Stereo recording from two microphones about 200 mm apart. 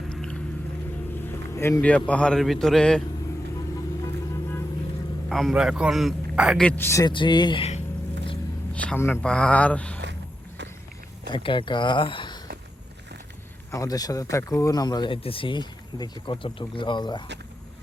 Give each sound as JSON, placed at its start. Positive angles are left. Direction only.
{"t": 0.1, "sound": "a sound", "side_deg": 5}
{"t": 1.5, "sound": "a man's voice", "side_deg": 10}
{"t": 5.3, "sound": "a man's voice", "side_deg": 0}
{"t": 8.7, "sound": "speech", "side_deg": 5}
{"t": 11.3, "sound": "speech", "side_deg": 25}
{"t": 13.7, "sound": "speech", "side_deg": 15}